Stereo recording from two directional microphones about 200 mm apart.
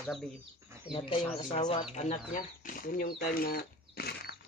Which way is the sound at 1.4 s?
30° left (ahead or behind).